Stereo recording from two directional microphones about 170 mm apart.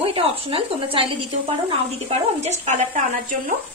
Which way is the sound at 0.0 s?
35° right (ahead or behind).